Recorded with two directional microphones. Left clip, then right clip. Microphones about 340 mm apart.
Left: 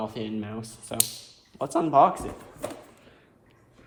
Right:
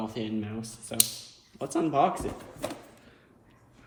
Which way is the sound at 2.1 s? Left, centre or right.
Centre.